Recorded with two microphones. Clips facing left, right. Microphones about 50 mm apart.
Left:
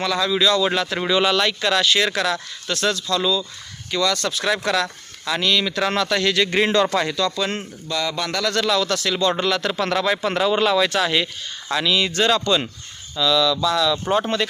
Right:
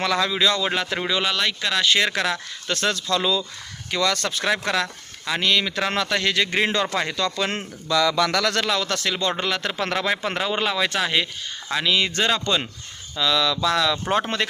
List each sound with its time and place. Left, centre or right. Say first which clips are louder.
0.2 s speech: left 3 dB; right
0.9 s speech: left 5 dB; centre
1.9 s speech: left 1 dB; right
3.1 s speech: left 1 dB; right; by 6.8 s centre
7.0 s speech: left 3 dB; right
7.3 s speech: left 1 dB; right
8.6 s speech: left 3 dB; right
9.1 s speech: left 4 dB; centre
13.1 s speech: left 3 dB; right